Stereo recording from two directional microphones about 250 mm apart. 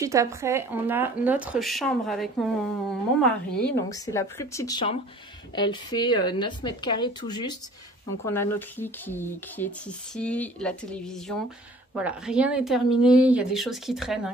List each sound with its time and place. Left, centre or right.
0.0 s speech: centre
3.6 s a woman's voice: centre